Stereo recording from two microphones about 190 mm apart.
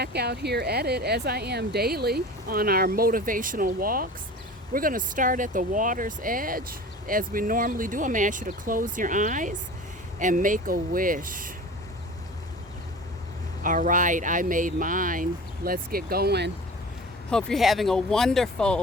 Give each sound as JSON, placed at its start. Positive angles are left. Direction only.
{"t": 0.0, "sound": "speech", "side_deg": -60}
{"t": 13.6, "sound": "speech", "side_deg": -45}
{"t": 17.3, "sound": "speech", "side_deg": 0}